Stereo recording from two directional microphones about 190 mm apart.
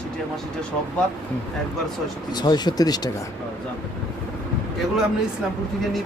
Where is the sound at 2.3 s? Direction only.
20° left (ahead or behind).